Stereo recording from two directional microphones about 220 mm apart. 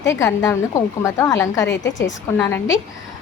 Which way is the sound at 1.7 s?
55° left (ahead or behind).